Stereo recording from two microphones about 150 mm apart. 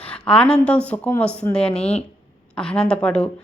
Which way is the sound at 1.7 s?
45° left (ahead or behind).